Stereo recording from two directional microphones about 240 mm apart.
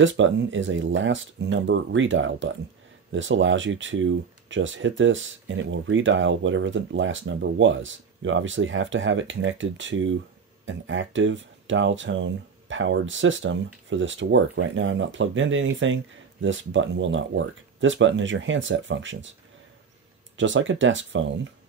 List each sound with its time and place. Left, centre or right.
0.0 s speech: right
20.3 s speech: right